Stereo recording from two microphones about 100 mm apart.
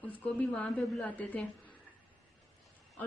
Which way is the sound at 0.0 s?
15° left (ahead or behind).